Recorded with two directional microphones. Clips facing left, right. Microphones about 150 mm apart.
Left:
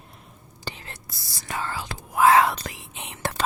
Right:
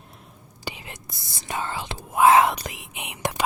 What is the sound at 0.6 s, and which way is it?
Whispering, 15° right (ahead or behind).